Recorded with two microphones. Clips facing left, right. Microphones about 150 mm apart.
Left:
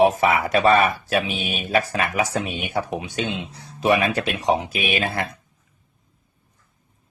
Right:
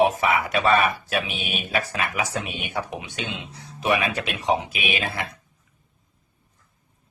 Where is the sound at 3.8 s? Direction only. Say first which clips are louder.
Left 4 dB; 40° left (ahead or behind).